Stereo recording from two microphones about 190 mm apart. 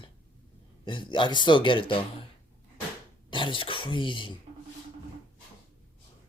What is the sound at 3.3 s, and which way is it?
Speech, 25° left (ahead or behind).